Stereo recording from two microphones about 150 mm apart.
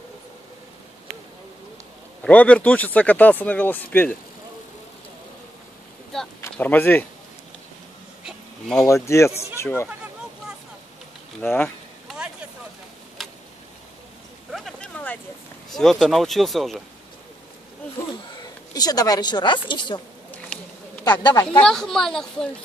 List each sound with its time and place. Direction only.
2.2 s speech: 10° left (ahead or behind)
6.4 s speech: 10° left (ahead or behind)
8.3 s a sound: centre (ahead or behind)
8.8 s speech: 20° left (ahead or behind)
11.4 s speech: 10° left (ahead or behind)
12.1 s a sound: 5° right (ahead or behind)
14.5 s a sound: centre (ahead or behind)
15.7 s speech: centre (ahead or behind)
18.1 s a woman's voice: 25° left (ahead or behind)
20.2 s insect: 10° left (ahead or behind)
21.0 s speech: 30° left (ahead or behind)
21.5 s speech: 5° left (ahead or behind)